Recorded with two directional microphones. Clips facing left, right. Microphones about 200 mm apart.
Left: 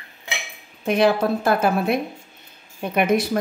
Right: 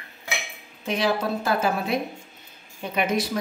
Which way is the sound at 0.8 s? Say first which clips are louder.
Left 6 dB; 55° left (ahead or behind).